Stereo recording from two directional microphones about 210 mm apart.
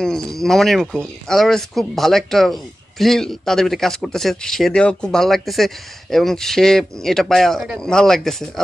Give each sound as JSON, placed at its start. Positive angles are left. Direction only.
{"t": 0.0, "sound": "speech", "side_deg": 0}